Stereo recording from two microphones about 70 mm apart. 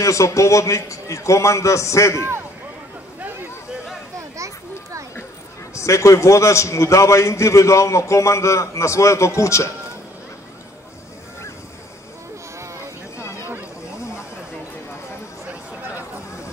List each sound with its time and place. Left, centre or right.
0.0 s a man's voice: left
5.8 s a man's voice: left